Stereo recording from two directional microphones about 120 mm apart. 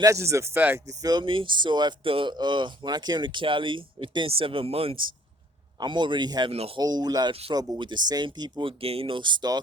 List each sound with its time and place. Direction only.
0.0 s speech: 25° right (ahead or behind)
1.0 s speech: 40° right (ahead or behind)
5.8 s speech: 40° right (ahead or behind)
6.5 s speech: 55° right (ahead or behind)
6.7 s speech: 35° right (ahead or behind)